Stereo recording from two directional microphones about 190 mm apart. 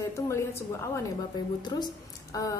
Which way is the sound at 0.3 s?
15° left (ahead or behind).